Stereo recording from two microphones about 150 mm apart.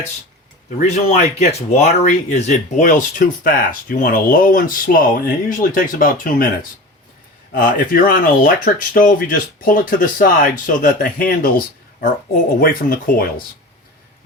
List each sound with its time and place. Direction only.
0.8 s speech: 55° left (ahead or behind); by 13.3 s 75° left (ahead or behind)